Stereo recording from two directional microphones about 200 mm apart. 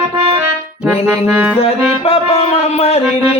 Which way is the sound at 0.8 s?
10° right (ahead or behind).